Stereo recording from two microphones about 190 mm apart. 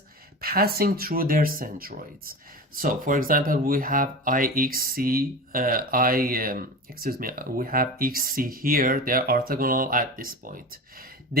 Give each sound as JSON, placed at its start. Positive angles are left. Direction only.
{"t": 0.4, "sound": "speech", "side_deg": -50}